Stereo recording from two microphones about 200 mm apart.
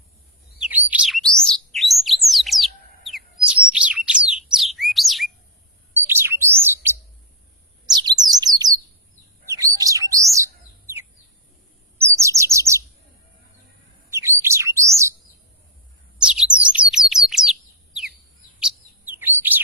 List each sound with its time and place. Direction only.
0.6 s chirp: 10° right (ahead or behind)
1.5 s bird: centre (ahead or behind)
6.1 s chirp: 10° right (ahead or behind)
7.9 s bird: 20° right (ahead or behind)
11.9 s chirp: 15° right (ahead or behind)
14.1 s bird: 15° right (ahead or behind)
16.1 s bird: 5° right (ahead or behind)
16.9 s chirp: centre (ahead or behind)
19.2 s chirp: 10° right (ahead or behind)